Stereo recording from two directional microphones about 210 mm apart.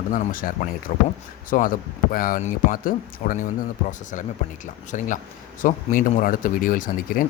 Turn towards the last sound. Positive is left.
turn(degrees=40)  # may be behind; listen again after turning